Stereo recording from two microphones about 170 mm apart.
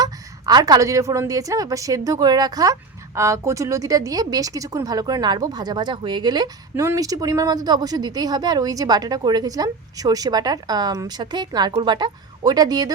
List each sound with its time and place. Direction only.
0.0 s a woman's voice: 20° right (ahead or behind)